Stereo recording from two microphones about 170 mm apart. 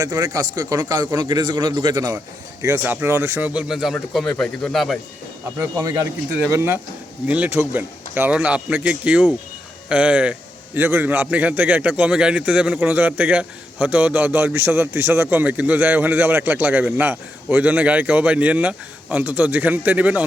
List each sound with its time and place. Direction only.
0.0 s a man's voice: 25° right (ahead or behind); by 4.9 s centre (ahead or behind)
5.5 s a man's voice: 20° right (ahead or behind)